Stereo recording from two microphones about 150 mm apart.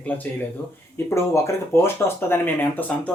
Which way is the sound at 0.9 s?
20° left (ahead or behind).